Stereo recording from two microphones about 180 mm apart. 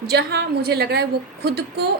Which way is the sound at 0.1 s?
65° right (ahead or behind).